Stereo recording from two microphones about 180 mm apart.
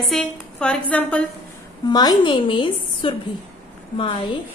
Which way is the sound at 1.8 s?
25° left (ahead or behind).